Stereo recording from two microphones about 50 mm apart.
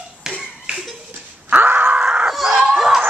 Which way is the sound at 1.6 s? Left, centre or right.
Right.